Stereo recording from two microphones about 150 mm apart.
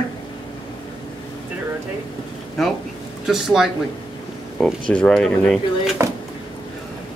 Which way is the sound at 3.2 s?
Centre (ahead or behind).